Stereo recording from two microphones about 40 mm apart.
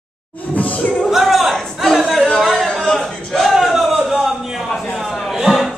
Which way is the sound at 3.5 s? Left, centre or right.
Centre.